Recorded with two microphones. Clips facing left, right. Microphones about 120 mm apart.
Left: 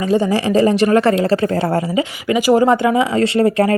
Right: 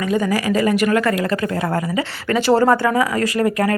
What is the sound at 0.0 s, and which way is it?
Speech, 30° left (ahead or behind).